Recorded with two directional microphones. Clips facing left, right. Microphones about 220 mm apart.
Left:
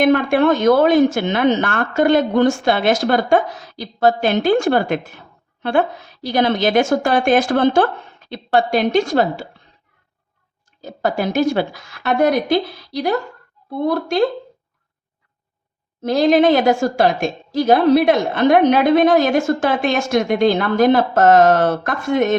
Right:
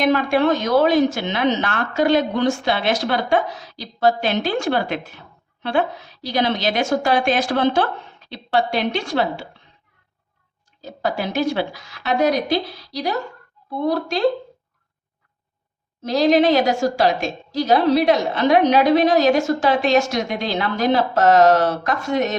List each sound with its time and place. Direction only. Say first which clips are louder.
0.0 s a woman's voice: left 3 dB; 55° left (ahead or behind)
10.8 s a woman's voice: left 3 dB; 50° left (ahead or behind)
16.0 s a woman's voice: left 2 dB; 50° left (ahead or behind)